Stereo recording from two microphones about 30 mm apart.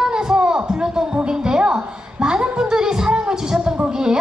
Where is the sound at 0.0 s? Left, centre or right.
Right.